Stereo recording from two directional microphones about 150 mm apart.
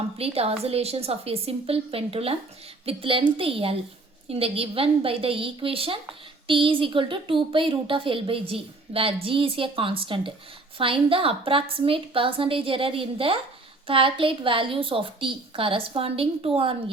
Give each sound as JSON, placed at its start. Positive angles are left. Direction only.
{"t": 0.2, "sound": "a woman's voice", "side_deg": -40}